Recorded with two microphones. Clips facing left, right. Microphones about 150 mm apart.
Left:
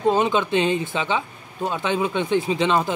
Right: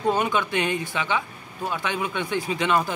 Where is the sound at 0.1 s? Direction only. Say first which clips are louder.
Left 3 dB; 25° left (ahead or behind).